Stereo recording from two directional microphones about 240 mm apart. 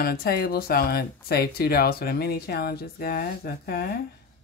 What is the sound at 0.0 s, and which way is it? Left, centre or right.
Speech, left.